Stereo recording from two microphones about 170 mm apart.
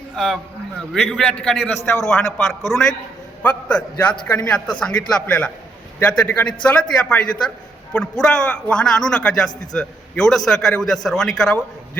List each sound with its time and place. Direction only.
1.0 s a man's voice: centre (ahead or behind)